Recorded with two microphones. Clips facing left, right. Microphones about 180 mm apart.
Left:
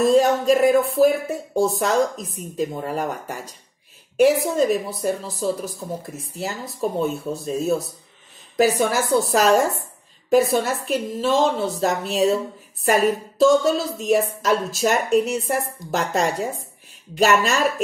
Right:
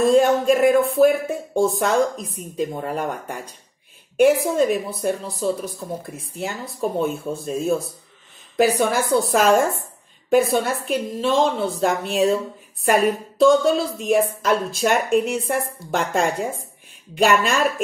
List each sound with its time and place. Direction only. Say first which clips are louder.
0.0 s speech: right 1 dB; centre (ahead or behind)